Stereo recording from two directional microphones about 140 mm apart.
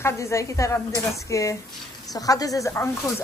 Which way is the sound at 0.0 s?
20° left (ahead or behind).